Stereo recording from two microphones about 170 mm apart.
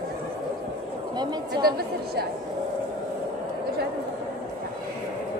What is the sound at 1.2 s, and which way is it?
Chatter, 25° right (ahead or behind).